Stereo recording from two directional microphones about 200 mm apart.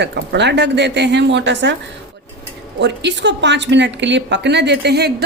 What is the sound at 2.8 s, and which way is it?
Speech, 60° right (ahead or behind).